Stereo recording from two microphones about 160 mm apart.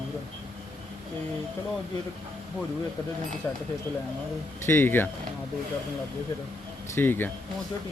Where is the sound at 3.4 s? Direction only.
15° left (ahead or behind).